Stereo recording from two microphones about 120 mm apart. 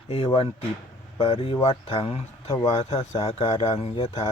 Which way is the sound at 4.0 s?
35° left (ahead or behind).